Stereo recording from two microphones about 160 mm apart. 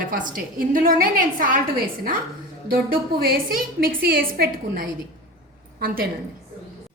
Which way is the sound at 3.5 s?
65° right (ahead or behind).